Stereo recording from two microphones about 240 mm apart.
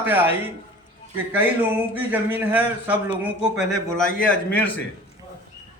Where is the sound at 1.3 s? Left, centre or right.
Centre.